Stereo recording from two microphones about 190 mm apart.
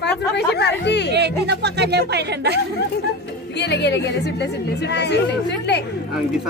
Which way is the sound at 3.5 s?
65° left (ahead or behind).